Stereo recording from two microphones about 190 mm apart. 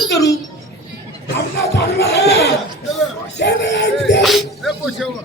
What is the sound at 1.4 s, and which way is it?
A man's voice, 60° left (ahead or behind).